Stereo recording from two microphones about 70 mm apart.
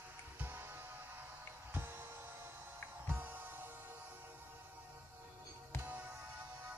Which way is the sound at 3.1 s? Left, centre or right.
Right.